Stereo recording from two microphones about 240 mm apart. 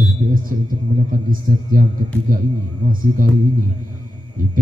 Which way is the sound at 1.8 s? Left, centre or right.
Right.